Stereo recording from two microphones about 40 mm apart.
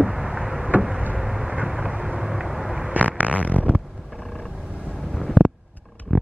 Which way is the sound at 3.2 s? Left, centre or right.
Right.